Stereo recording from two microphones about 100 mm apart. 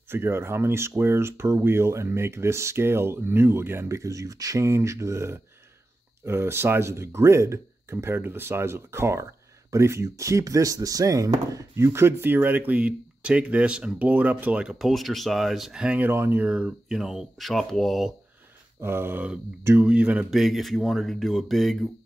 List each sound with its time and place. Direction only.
0.1 s speech: 25° right (ahead or behind)
16.1 s speech: 20° right (ahead or behind); by 18.1 s centre (ahead or behind)
18.8 s speech: 25° right (ahead or behind); by 21.7 s centre (ahead or behind)